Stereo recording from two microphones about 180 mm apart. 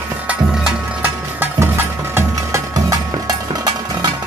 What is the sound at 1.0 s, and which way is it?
Music, 10° right (ahead or behind).